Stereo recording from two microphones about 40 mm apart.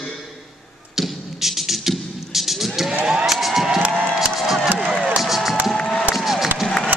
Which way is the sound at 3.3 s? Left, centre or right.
Centre.